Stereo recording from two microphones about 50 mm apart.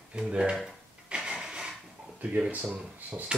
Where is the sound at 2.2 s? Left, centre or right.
Right.